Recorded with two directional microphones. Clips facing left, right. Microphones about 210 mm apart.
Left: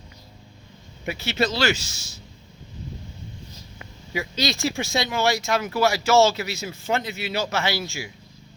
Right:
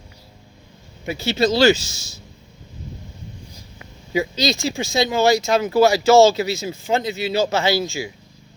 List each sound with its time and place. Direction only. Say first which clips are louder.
1.1 s speech: right 6 dB; 30° right (ahead or behind)
4.1 s speech: right 6 dB; 25° right (ahead or behind)
4.5 s speech: right 2 dB; 90° right
5.0 s speech: right 8 dB; 30° right (ahead or behind)